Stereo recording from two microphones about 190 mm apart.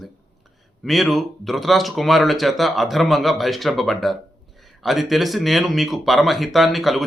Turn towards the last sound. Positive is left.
turn(degrees=0)  # may be behind; listen again after turning